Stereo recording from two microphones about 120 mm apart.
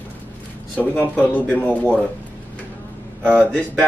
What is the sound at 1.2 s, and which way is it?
Speech, 15° left (ahead or behind).